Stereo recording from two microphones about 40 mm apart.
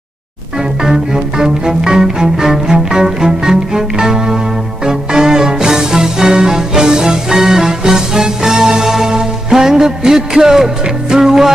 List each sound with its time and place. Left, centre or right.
0.8 s music: centre